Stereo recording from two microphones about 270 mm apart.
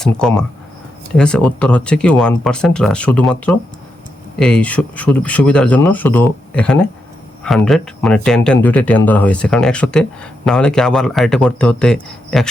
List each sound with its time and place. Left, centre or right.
0.0 s speech: centre